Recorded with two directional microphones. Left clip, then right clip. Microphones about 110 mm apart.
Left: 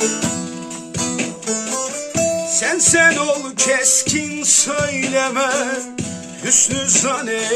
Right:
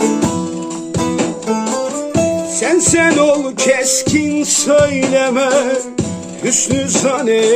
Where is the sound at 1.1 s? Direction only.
40° right (ahead or behind).